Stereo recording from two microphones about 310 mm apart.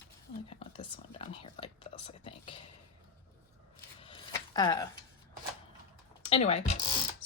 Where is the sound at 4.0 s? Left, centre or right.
Centre.